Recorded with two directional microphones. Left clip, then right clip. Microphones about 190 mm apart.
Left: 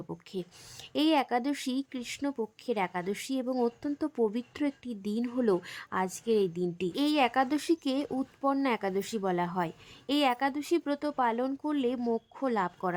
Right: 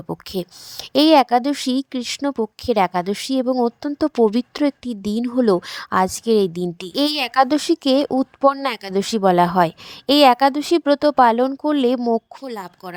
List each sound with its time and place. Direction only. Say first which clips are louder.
0.1 s a woman's voice: right 15 dB; 50° right (ahead or behind)